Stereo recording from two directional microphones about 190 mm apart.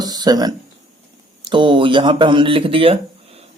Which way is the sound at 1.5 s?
25° right (ahead or behind).